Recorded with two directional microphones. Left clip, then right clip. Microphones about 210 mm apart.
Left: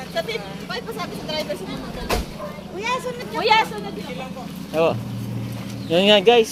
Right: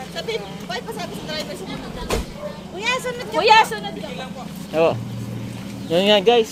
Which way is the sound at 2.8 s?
Centre (ahead or behind).